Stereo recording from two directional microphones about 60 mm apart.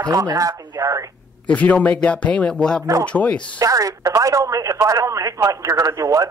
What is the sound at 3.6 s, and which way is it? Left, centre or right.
A man's voice, right.